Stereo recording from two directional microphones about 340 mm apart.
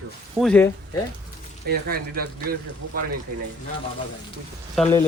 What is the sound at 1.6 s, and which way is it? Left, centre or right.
Speech, right.